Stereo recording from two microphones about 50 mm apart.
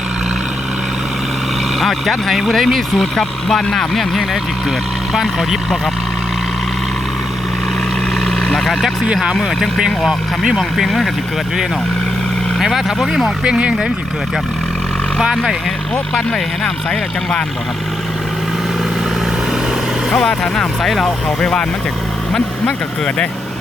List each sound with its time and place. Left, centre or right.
1.8 s speech: centre
8.2 s vehicle: centre
9.6 s speech: centre
10.8 s speech: centre
12.5 s speech: centre
13.4 s speech: centre
16.1 s speech: centre
20.4 s speech: centre